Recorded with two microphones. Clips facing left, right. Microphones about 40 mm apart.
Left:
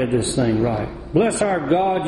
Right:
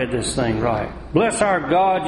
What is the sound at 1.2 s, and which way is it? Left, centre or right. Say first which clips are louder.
Speech: right 1 dB; right.